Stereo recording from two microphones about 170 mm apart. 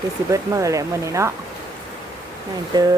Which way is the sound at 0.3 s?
20° right (ahead or behind).